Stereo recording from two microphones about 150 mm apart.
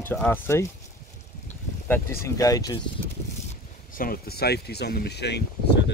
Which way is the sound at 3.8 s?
70° left (ahead or behind).